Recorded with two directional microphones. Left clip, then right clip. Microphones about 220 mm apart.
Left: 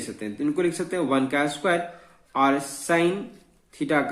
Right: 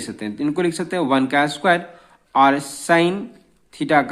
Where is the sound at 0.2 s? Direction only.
35° right (ahead or behind).